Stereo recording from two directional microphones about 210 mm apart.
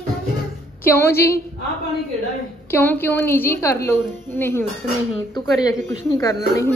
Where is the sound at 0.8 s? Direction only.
10° left (ahead or behind).